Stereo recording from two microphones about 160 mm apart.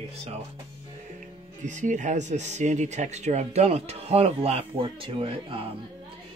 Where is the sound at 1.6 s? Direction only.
50° right (ahead or behind).